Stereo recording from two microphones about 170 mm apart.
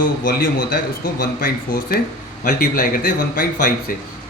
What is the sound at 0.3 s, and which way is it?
A man's voice, 60° left (ahead or behind).